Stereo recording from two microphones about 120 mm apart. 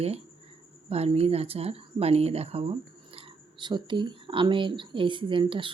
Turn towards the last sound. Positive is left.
turn(degrees=-45)  # may be behind; listen again after turning